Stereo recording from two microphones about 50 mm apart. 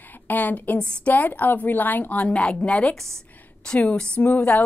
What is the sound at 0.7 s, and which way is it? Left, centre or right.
Speech, centre.